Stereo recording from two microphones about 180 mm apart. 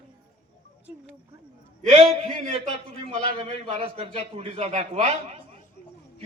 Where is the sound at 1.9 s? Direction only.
30° right (ahead or behind).